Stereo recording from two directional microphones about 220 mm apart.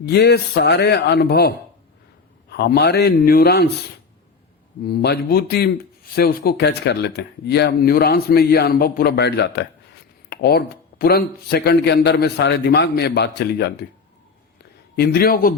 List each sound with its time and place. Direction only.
0.0 s speech: 50° left (ahead or behind)
4.9 s speech: 45° left (ahead or behind)
14.9 s speech: 45° left (ahead or behind)